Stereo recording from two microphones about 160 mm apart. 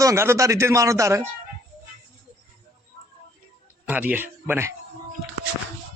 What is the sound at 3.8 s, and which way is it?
Speech, 10° right (ahead or behind).